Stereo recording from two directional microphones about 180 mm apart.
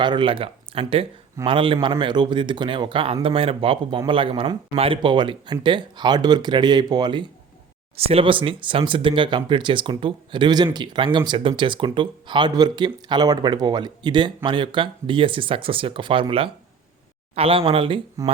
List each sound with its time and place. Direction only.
0.0 s speech: 25° right (ahead or behind)